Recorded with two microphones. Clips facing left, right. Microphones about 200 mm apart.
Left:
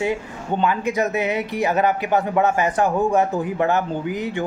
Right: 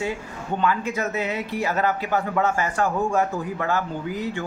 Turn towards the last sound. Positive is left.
turn(degrees=20)  # may be behind; listen again after turning